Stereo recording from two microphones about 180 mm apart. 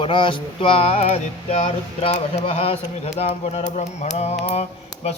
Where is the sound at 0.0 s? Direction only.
25° left (ahead or behind).